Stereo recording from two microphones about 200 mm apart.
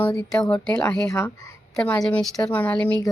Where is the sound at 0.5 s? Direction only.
10° left (ahead or behind).